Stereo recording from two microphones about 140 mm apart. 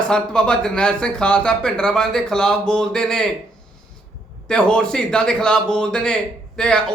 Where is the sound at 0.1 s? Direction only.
5° left (ahead or behind).